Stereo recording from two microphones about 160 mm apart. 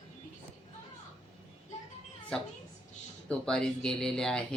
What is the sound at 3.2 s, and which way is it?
Speech, 5° left (ahead or behind).